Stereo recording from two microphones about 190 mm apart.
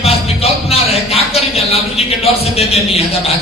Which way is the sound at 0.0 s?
30° left (ahead or behind).